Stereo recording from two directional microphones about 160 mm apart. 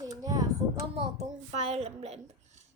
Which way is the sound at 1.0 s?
40° right (ahead or behind).